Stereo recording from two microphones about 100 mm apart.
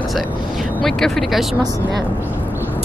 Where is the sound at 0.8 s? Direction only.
5° left (ahead or behind).